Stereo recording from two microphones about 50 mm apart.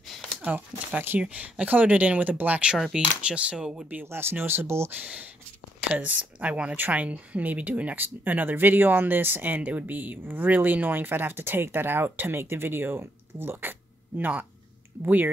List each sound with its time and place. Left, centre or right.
0.4 s speech: right
4.0 s speech: right
5.8 s speech: right